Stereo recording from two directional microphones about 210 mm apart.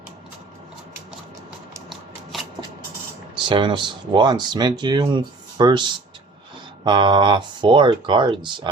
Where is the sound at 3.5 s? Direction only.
20° right (ahead or behind).